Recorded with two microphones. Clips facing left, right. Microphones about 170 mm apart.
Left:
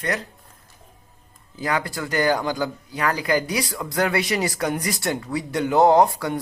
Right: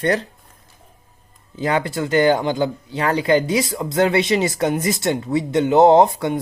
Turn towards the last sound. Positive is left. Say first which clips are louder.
# right 4 dB
turn(degrees=-20)  # may be behind; listen again after turning